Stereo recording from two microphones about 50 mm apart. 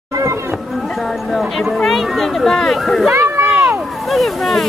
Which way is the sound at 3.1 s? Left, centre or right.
Right.